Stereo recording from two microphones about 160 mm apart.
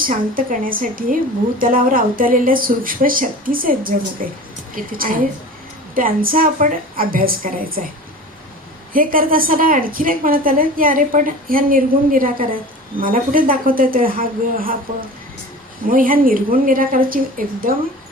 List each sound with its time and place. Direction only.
0.0 s a woman's voice: 60° right (ahead or behind)
8.9 s a woman's voice: 60° right (ahead or behind)
15.9 s a woman's voice: 60° right (ahead or behind)